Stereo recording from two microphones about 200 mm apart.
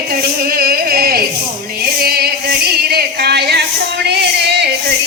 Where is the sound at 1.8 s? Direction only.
50° right (ahead or behind).